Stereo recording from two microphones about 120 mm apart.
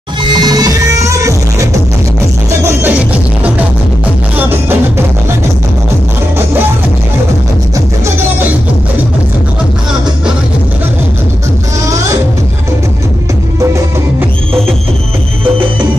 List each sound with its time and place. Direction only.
0.3 s music: 35° right (ahead or behind); by 5.0 s 20° right (ahead or behind)